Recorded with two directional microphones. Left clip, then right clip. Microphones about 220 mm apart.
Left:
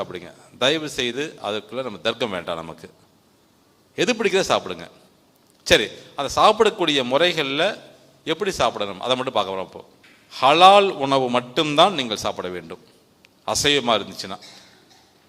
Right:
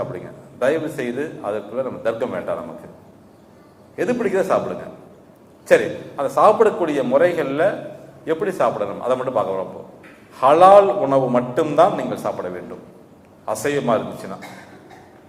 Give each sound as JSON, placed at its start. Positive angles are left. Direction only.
{"t": 0.6, "sound": "a man's voice", "side_deg": 45}
{"t": 3.9, "sound": "a man's voice", "side_deg": 50}
{"t": 5.6, "sound": "a man's voice", "side_deg": 40}
{"t": 10.3, "sound": "a man's voice", "side_deg": 30}